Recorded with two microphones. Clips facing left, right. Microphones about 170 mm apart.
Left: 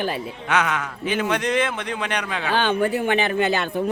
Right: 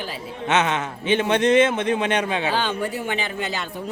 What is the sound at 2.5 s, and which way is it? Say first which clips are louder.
Speech: left 4 dB; 60° left (ahead or behind).